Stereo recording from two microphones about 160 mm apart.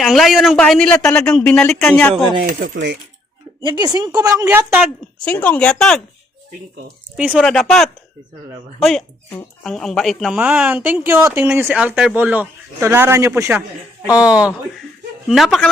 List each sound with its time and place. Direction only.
0.0 s a man's voice: centre (ahead or behind)
2.6 s speech: 75° right (ahead or behind)
3.6 s a woman's voice: 30° right (ahead or behind)
4.4 s speech: 10° right (ahead or behind)
5.2 s speech: 10° left (ahead or behind)
7.2 s a man's voice: 5° right (ahead or behind)